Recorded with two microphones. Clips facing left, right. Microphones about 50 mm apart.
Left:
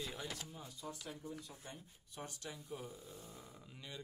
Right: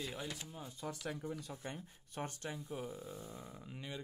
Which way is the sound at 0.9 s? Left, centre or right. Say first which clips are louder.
Right 6 dB; right.